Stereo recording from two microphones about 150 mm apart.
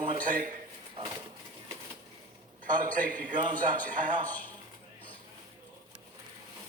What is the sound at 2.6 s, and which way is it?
A man's voice, 60° right (ahead or behind).